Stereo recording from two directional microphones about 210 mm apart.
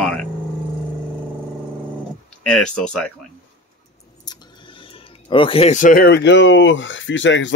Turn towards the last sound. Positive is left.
turn(degrees=60)  # may be behind; listen again after turning